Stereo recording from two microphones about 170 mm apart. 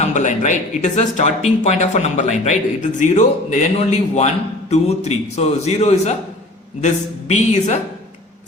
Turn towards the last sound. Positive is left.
turn(degrees=40)  # may be behind; listen again after turning